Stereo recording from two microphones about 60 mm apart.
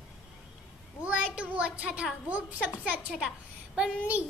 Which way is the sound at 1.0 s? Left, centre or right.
Centre.